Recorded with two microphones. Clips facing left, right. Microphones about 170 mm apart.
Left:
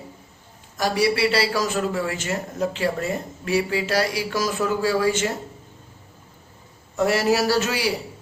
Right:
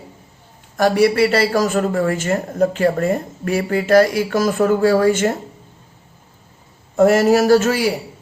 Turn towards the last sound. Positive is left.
turn(degrees=-50)  # may be behind; listen again after turning